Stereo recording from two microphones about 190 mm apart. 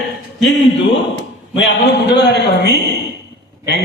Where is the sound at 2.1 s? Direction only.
65° left (ahead or behind).